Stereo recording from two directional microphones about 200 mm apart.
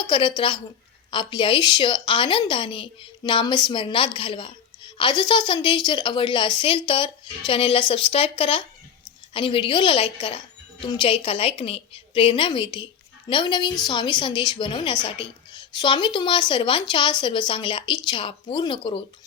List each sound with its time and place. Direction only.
0.0 s a woman's voice: 25° left (ahead or behind)